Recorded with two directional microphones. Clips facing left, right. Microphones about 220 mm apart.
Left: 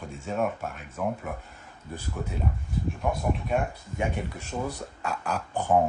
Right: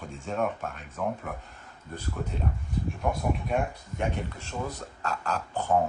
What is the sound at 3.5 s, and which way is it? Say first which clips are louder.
Speech: left 1 dB; 10° left (ahead or behind).